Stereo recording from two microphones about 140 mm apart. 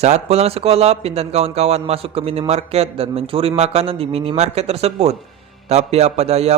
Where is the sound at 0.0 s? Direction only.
50° right (ahead or behind).